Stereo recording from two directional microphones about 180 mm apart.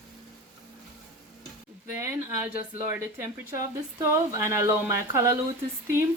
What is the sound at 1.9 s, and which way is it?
Speech, 15° right (ahead or behind).